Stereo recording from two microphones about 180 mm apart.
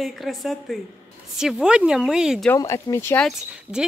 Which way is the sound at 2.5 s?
15° left (ahead or behind).